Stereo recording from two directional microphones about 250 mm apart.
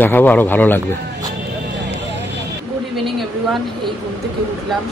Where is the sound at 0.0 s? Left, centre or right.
Centre.